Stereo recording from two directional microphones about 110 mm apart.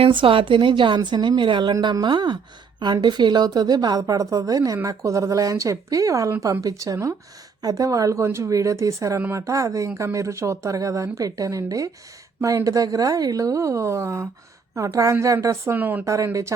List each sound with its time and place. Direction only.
0.0 s a woman's voice: 50° right (ahead or behind); by 16.0 s 15° right (ahead or behind)
16.0 s speech: 30° right (ahead or behind)